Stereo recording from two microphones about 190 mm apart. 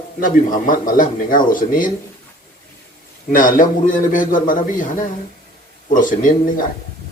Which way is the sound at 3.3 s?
45° left (ahead or behind).